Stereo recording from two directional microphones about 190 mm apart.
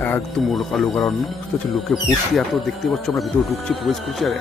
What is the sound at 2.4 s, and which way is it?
Speech, centre (ahead or behind).